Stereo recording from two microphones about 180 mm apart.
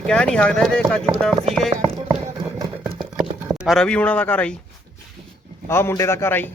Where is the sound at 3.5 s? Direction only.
Centre (ahead or behind).